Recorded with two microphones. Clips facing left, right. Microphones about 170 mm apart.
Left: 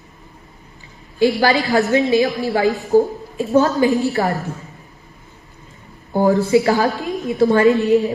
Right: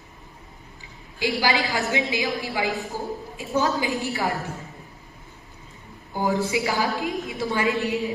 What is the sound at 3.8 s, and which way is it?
Speech, 40° left (ahead or behind).